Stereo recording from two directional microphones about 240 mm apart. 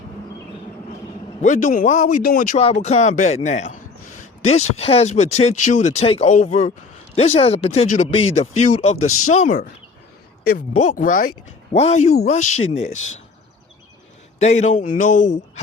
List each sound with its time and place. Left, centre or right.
1.4 s speech: left
10.8 s speech: left
14.4 s speech: left